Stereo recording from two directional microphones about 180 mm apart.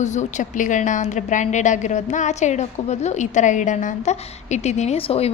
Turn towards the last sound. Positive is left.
turn(degrees=35)  # may be behind; listen again after turning